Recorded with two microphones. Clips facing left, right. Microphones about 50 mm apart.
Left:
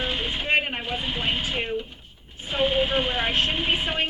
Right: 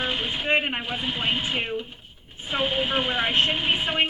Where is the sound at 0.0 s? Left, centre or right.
Centre.